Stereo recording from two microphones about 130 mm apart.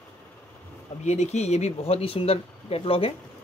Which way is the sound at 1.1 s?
60° left (ahead or behind).